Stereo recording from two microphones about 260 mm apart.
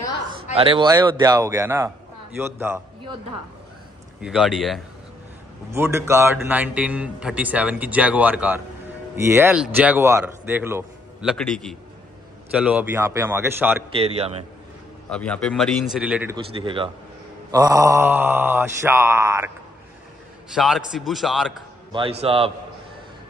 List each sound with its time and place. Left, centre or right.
0.6 s speech: centre
4.2 s a man's voice: centre
13.9 s speech: right
15.0 s a man's voice: centre
16.5 s speech: centre
20.5 s a man's voice: centre
22.2 s speech: right